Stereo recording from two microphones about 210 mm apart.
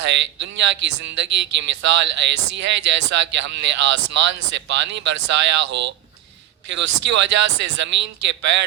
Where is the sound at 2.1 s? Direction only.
60° right (ahead or behind).